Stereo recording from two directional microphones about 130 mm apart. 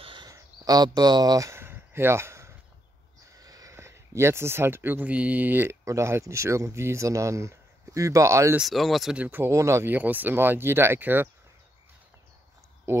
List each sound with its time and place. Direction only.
0.0 s a sound: 40° right (ahead or behind); by 2.5 s 20° right (ahead or behind)
3.3 s speech: 30° right (ahead or behind)
8.5 s speech: centre (ahead or behind); by 11.2 s 15° right (ahead or behind)